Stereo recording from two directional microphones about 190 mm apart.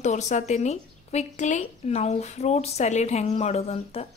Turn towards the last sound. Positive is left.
turn(degrees=30)  # may be behind; listen again after turning